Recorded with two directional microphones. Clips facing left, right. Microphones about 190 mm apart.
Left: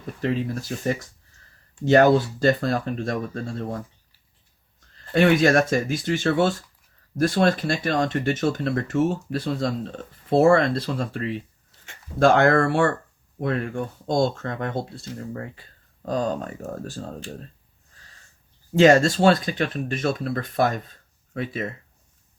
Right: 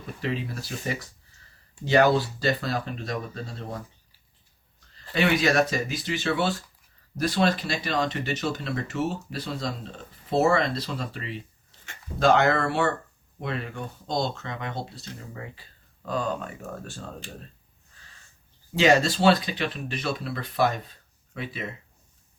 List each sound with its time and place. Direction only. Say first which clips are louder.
0.2 s speech: left 6 dB; 45° left (ahead or behind)
5.1 s speech: left 5 dB; 50° left (ahead or behind)
18.8 s speech: left 5 dB; 45° left (ahead or behind)